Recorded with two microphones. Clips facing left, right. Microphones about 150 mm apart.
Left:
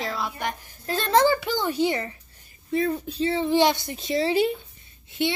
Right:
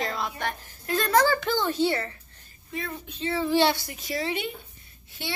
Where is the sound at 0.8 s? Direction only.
25° left (ahead or behind).